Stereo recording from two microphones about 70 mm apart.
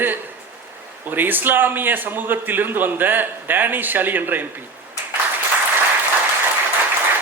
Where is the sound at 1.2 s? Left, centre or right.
Right.